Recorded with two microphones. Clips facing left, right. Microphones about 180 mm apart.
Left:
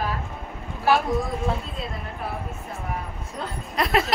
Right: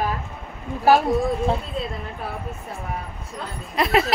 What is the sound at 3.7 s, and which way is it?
Speech, centre (ahead or behind).